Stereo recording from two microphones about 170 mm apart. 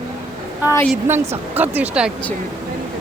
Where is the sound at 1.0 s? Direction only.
15° right (ahead or behind).